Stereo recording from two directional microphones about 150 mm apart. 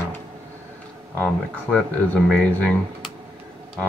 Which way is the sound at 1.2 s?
5° left (ahead or behind).